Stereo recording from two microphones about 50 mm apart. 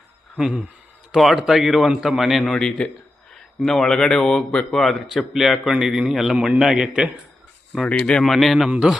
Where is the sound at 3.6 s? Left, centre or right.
Centre.